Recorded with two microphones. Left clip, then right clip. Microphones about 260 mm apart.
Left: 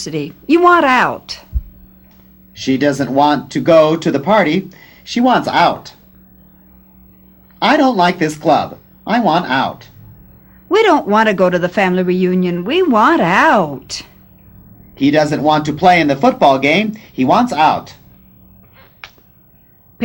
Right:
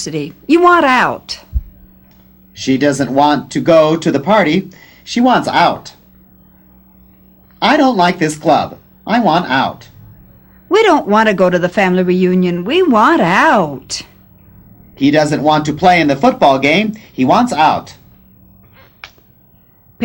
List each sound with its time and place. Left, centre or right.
0.0 s a man's voice: left
2.6 s a man's voice: left
7.6 s a man's voice: left
19.0 s a sound: left